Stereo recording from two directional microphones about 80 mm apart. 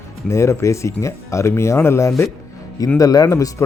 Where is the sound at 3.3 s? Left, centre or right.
Left.